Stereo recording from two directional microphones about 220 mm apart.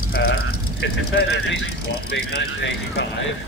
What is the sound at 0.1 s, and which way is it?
Vehicle, 45° left (ahead or behind).